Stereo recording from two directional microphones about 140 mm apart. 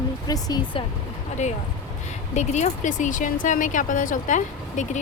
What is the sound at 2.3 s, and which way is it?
Speech, 55° left (ahead or behind).